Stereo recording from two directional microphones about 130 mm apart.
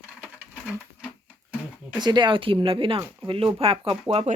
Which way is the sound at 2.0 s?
35° right (ahead or behind).